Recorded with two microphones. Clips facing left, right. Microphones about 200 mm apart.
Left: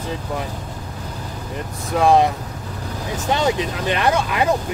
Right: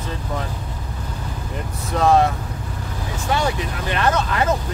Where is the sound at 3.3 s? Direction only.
20° left (ahead or behind).